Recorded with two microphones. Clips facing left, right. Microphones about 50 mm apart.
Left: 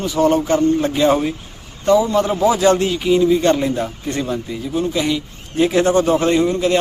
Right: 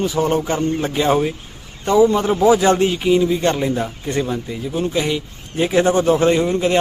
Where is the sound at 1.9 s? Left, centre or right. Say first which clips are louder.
Even; right.